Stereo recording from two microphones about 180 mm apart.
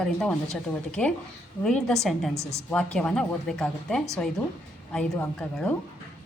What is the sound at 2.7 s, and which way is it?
A woman's voice, 5° left (ahead or behind).